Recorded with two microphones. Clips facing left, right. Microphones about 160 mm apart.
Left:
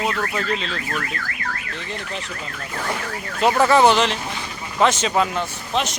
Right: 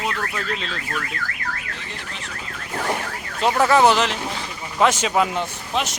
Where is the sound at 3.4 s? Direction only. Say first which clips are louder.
Left 1 dB; centre (ahead or behind).